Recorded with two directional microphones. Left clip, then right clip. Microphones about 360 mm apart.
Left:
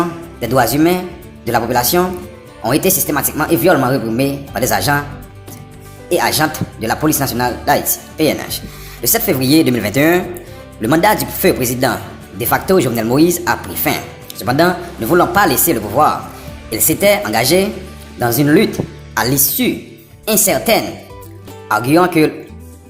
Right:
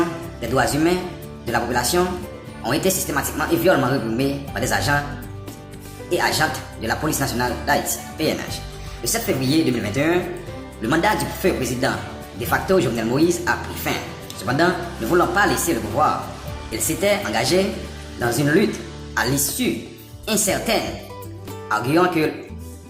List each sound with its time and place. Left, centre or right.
0.4 s speech: centre
6.1 s speech: centre